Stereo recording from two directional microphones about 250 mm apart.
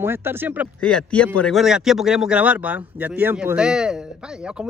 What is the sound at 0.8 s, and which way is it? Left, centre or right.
A man's voice, centre.